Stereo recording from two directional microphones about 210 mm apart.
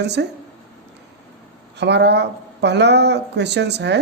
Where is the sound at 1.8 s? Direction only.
55° right (ahead or behind).